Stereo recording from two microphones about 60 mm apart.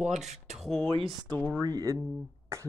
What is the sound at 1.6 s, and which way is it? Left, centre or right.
Speech, right.